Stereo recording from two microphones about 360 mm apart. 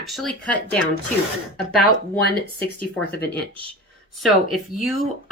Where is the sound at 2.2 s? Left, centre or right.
Left.